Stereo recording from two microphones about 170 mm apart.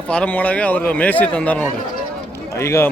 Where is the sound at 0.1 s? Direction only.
10° left (ahead or behind).